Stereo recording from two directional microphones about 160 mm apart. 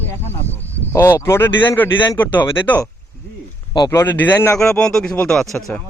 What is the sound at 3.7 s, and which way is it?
Speech, 20° left (ahead or behind).